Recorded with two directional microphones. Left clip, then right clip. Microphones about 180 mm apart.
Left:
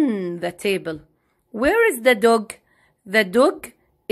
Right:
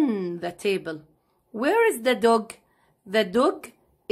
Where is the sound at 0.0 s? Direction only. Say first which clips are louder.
Left 3 dB; 15° left (ahead or behind).